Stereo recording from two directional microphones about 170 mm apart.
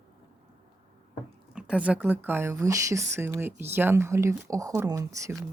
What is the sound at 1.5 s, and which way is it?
Speech, 5° right (ahead or behind).